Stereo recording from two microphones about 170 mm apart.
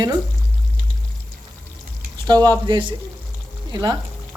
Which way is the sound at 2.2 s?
25° right (ahead or behind).